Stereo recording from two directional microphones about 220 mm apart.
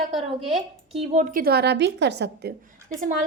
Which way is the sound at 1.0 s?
35° right (ahead or behind).